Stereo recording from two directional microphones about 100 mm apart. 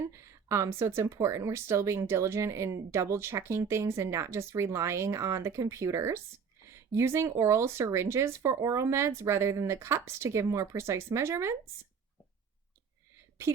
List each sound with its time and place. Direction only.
0.2 s speech: 30° right (ahead or behind)